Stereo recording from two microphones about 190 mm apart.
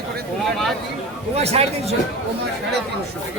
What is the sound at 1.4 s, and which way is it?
Speech, 35° right (ahead or behind).